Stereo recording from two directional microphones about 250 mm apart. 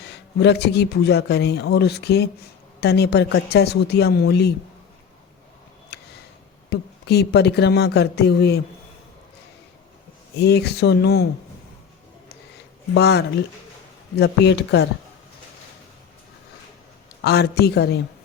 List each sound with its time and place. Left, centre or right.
0.1 s speech: left
5.9 s a sound: left
6.7 s speech: left
10.3 s speech: left
12.9 s speech: left
17.2 s speech: left